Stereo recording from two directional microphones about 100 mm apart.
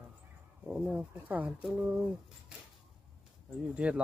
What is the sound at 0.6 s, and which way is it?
Speech, 15° right (ahead or behind).